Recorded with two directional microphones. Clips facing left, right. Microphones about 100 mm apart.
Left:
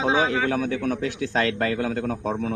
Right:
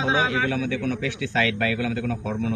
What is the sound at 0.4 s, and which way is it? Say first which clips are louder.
Speech: left 1 dB; 40° left (ahead or behind).